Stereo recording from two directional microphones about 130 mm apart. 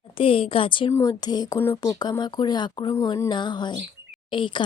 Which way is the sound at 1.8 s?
30° left (ahead or behind).